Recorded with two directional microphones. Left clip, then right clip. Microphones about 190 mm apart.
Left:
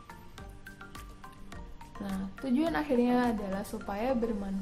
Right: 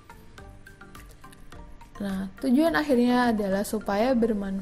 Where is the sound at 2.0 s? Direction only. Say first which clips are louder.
Right 7 dB; 25° right (ahead or behind).